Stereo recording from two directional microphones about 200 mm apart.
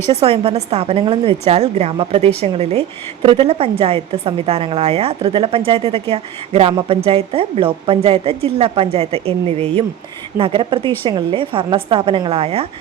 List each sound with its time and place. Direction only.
0.1 s a woman's voice: 30° right (ahead or behind)